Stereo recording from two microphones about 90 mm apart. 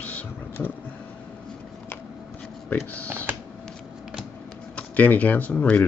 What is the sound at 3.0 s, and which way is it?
Computer keyboard, 30° right (ahead or behind).